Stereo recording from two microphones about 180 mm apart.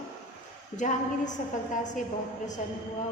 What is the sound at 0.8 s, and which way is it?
Speech, 45° left (ahead or behind).